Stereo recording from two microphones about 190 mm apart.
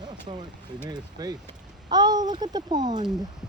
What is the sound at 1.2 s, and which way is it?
Speech, 20° right (ahead or behind).